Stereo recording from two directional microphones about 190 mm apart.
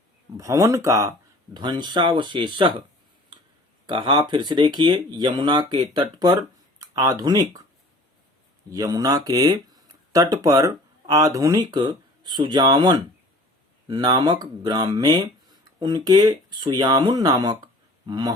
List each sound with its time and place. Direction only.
0.3 s speech: 15° right (ahead or behind)
3.8 s speech: 25° right (ahead or behind)
8.7 s speech: 20° right (ahead or behind)